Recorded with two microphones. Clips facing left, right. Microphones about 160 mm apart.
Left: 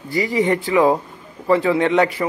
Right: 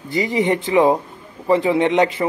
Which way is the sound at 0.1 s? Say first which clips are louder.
Even; 20° right (ahead or behind).